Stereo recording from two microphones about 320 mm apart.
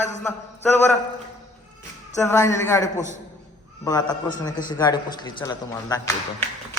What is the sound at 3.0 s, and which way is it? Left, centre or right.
Speech, left.